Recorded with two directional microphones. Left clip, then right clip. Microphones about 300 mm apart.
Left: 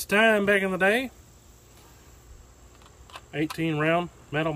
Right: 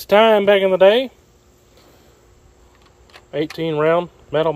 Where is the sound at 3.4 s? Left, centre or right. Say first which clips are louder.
Right 8 dB; centre.